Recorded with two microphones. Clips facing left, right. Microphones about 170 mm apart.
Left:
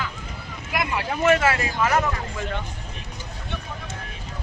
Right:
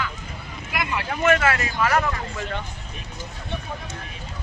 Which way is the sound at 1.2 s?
25° left (ahead or behind).